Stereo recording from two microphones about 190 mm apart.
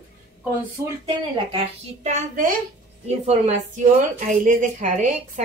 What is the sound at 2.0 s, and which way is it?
A woman's voice, 40° right (ahead or behind).